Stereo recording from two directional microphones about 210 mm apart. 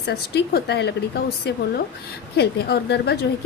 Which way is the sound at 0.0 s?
50° left (ahead or behind).